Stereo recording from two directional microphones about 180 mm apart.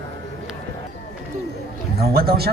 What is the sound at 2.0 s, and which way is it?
Speech, 60° right (ahead or behind).